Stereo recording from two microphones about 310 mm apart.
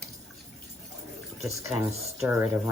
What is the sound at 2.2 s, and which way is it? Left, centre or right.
Speech, centre.